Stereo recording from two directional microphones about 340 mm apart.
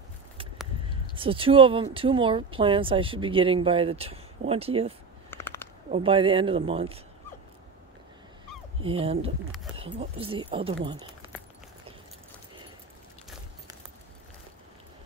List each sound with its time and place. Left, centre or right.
1.1 s speech: centre
5.3 s a sound: centre
5.9 s speech: centre
8.8 s speech: centre